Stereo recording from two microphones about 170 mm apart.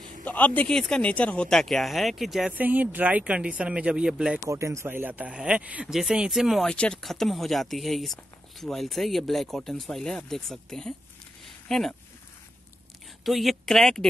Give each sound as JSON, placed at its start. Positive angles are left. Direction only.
{"t": 0.2, "sound": "speech", "side_deg": 10}
{"t": 4.5, "sound": "speech", "side_deg": -15}
{"t": 13.2, "sound": "speech", "side_deg": 0}